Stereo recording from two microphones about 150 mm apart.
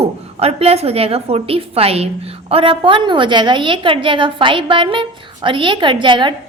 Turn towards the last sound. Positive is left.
turn(degrees=-35)  # may be behind; listen again after turning